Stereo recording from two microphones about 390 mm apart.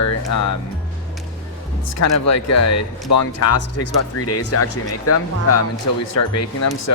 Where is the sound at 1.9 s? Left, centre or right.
Left.